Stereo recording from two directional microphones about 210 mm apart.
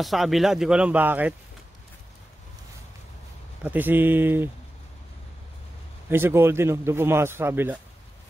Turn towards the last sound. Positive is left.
turn(degrees=-10)  # may be behind; listen again after turning